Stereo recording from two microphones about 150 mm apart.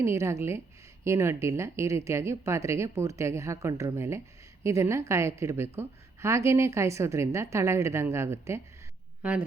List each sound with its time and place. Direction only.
0.0 s a woman's voice: 20° right (ahead or behind)